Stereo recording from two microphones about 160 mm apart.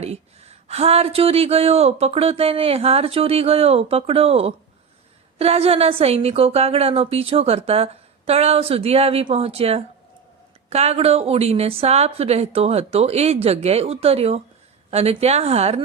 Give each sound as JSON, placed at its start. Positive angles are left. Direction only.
{"t": 0.0, "sound": "speech", "side_deg": -40}